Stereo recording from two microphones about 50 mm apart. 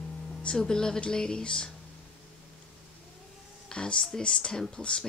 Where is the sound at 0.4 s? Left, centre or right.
Centre.